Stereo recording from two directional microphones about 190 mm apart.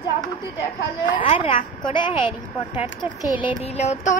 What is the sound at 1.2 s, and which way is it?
Speech, 25° left (ahead or behind).